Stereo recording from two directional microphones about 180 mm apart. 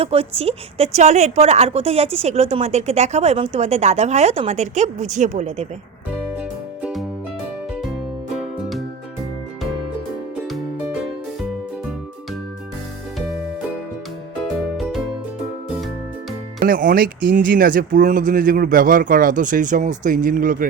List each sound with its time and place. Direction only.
0.0 s a woman's voice: 35° right (ahead or behind)
16.6 s speech: 50° right (ahead or behind)